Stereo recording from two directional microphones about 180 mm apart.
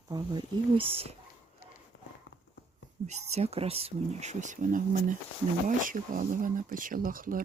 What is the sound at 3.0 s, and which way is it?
Speech, 35° right (ahead or behind).